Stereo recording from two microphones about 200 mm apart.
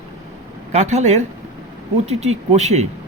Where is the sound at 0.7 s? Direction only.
35° right (ahead or behind).